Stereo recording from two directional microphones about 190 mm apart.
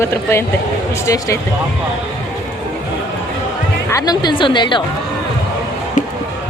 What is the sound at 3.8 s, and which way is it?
Speech, 20° left (ahead or behind).